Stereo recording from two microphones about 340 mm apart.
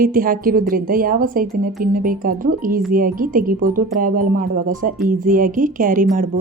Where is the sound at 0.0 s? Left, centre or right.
Right.